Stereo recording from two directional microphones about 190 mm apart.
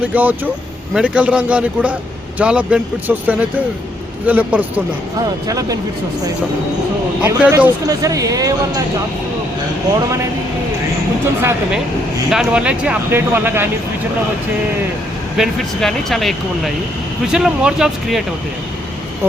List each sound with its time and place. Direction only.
0.1 s speech: 10° right (ahead or behind)
5.5 s speech: 20° right (ahead or behind)
7.2 s speech: 10° right (ahead or behind)
12.3 s speech: 5° right (ahead or behind)
15.4 s speech: centre (ahead or behind)
17.3 s speech: 5° right (ahead or behind)